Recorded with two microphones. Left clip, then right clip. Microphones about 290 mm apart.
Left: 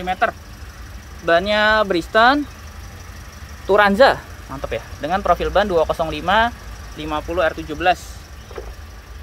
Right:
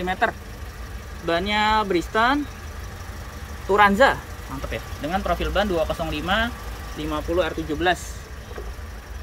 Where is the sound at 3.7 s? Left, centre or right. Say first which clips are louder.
Left 3 dB; left; by 7.9 s centre.